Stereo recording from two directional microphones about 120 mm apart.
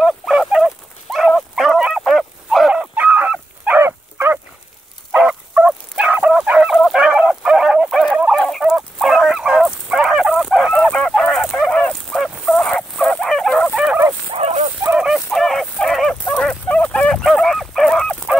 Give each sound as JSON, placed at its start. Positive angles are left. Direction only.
{"t": 0.0, "sound": "dog", "side_deg": 0}
{"t": 5.1, "sound": "fowl", "side_deg": -10}
{"t": 10.9, "sound": "goose", "side_deg": 5}
{"t": 14.3, "sound": "dog", "side_deg": -60}
{"t": 14.8, "sound": "dog", "side_deg": -10}